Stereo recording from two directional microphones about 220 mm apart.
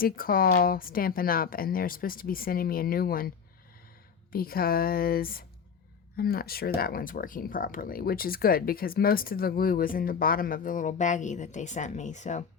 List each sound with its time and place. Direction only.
0.0 s a woman's voice: 40° left (ahead or behind)